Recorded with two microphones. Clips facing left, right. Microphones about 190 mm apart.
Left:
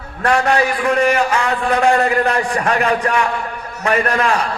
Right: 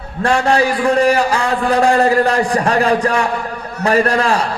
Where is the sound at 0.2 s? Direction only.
30° right (ahead or behind).